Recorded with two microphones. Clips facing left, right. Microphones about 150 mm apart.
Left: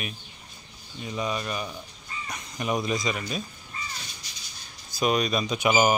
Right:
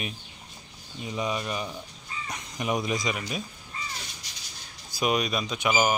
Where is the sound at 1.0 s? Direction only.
15° right (ahead or behind).